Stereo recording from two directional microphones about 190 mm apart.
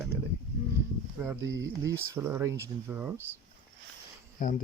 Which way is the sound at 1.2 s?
15° right (ahead or behind).